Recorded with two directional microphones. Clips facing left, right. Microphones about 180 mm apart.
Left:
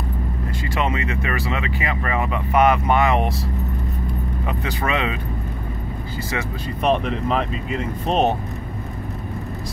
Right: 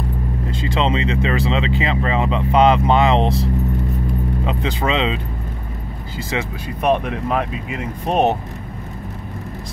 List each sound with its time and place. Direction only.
0.5 s speech: 25° right (ahead or behind)
4.5 s speech: 20° right (ahead or behind)
6.3 s speech: 10° right (ahead or behind)